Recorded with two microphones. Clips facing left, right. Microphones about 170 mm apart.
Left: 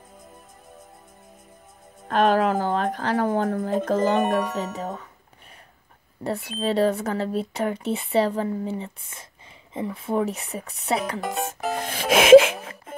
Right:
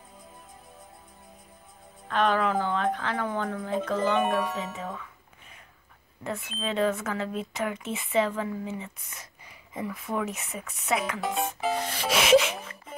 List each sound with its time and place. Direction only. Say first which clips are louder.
2.0 s speech: left 5 dB; 45° left (ahead or behind)
6.2 s speech: left 7 dB; 35° left (ahead or behind)
11.1 s speech: left 1 dB; centre (ahead or behind)
11.4 s music: left 1 dB; 45° left (ahead or behind)